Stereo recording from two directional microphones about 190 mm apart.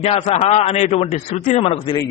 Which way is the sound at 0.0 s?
30° left (ahead or behind).